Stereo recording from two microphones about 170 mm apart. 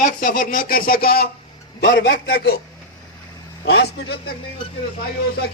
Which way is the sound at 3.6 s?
75° left (ahead or behind).